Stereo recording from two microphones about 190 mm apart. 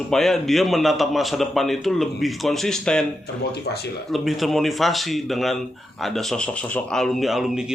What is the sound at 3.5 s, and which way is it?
Speech, 60° left (ahead or behind).